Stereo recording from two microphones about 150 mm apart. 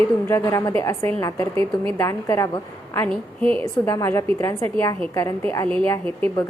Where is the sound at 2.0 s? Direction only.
20° left (ahead or behind).